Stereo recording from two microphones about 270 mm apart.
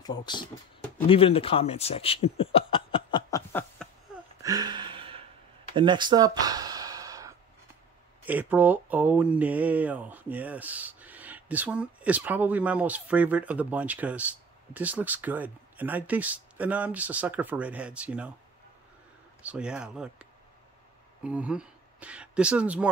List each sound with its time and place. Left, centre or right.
0.0 s speech: centre
4.4 s a sound: centre
5.8 s gasp: centre
8.3 s speech: centre
19.4 s speech: centre